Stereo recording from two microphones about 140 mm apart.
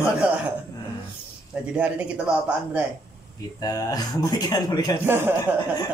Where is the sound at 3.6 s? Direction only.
25° left (ahead or behind).